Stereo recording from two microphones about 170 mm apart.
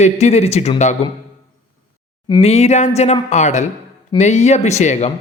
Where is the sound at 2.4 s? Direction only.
40° left (ahead or behind).